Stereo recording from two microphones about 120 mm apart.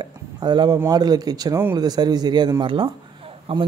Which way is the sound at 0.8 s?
35° right (ahead or behind).